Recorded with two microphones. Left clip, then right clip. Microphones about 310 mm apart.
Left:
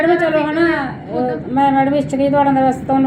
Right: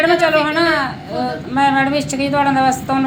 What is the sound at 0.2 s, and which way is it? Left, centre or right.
A woman's voice, centre.